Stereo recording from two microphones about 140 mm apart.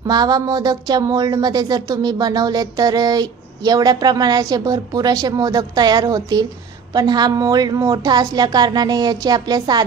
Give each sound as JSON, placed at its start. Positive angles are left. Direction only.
{"t": 0.0, "sound": "a woman's voice", "side_deg": -30}